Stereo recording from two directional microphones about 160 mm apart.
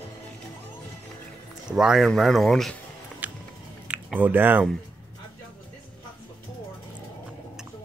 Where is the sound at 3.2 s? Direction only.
10° right (ahead or behind).